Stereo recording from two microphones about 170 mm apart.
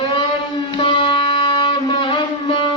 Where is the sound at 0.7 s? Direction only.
30° left (ahead or behind).